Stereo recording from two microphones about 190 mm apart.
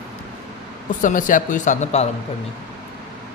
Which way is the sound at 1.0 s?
45° left (ahead or behind).